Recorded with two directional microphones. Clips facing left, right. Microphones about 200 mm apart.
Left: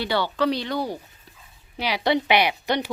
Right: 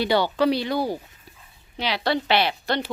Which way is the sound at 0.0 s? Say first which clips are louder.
Right 3 dB; 15° right (ahead or behind).